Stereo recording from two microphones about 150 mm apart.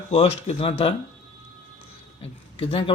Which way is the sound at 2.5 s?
35° left (ahead or behind).